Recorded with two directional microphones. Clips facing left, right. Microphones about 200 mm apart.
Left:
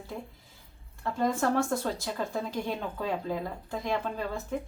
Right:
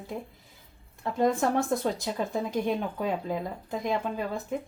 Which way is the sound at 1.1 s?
20° right (ahead or behind).